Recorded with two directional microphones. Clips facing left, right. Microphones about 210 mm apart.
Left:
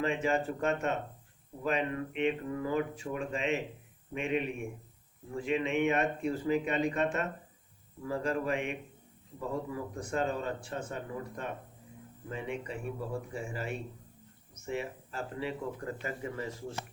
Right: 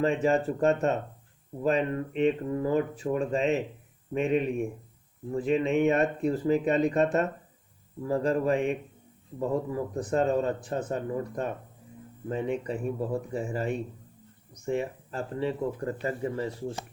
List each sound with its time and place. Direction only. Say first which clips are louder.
0.0 s speech: right 6 dB; 35° right (ahead or behind)
9.9 s speech: right 8 dB; 35° right (ahead or behind)